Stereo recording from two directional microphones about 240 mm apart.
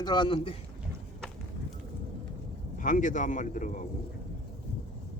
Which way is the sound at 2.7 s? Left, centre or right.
Left.